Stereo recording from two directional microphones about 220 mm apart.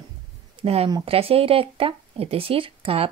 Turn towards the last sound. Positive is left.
turn(degrees=-25)  # may be behind; listen again after turning